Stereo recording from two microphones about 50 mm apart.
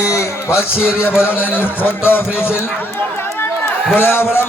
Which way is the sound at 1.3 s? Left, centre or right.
Left.